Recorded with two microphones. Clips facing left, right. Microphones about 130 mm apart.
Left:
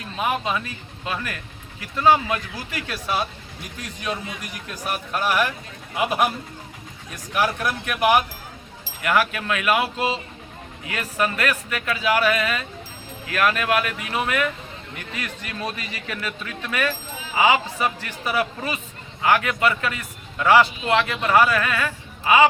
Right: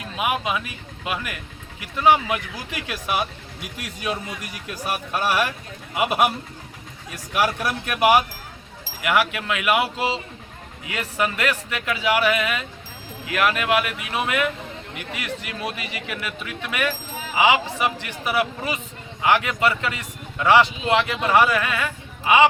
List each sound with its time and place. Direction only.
0.2 s a man's voice: 10° right (ahead or behind)
4.9 s a man's voice: 10° right (ahead or behind)
7.3 s a man's voice: 10° right (ahead or behind)